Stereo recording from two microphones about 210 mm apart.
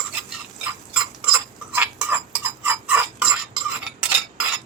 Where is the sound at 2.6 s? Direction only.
10° right (ahead or behind).